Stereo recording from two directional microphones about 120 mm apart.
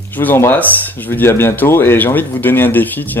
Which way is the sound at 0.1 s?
15° left (ahead or behind).